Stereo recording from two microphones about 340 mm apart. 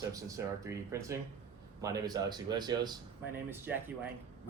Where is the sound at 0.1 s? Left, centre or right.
Centre.